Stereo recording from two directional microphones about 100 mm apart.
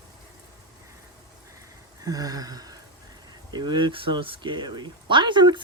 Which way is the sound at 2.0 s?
40° right (ahead or behind).